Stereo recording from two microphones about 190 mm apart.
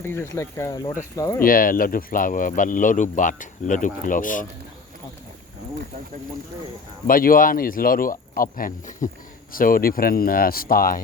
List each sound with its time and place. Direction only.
0.0 s speech: 10° left (ahead or behind)
1.4 s speech: 50° left (ahead or behind)
7.1 s speech: 50° left (ahead or behind)